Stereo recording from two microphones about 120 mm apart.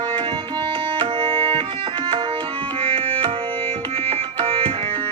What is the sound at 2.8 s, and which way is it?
Music, 50° right (ahead or behind).